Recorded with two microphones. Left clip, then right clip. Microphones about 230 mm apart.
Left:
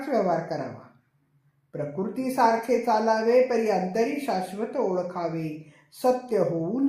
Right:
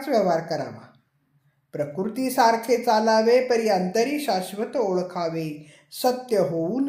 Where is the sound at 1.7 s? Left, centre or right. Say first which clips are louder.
Right 3 dB; right.